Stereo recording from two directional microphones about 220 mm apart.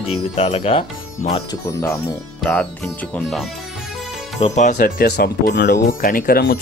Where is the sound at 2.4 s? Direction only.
5° left (ahead or behind).